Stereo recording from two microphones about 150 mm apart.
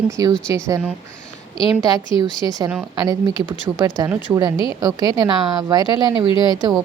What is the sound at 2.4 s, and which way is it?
Speech, 25° right (ahead or behind).